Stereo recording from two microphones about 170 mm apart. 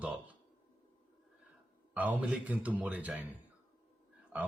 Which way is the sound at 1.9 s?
10° right (ahead or behind).